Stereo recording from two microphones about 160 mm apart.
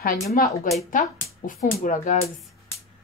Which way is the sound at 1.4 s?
55° left (ahead or behind).